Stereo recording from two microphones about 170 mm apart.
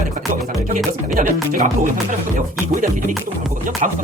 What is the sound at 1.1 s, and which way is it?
Speech, 50° right (ahead or behind).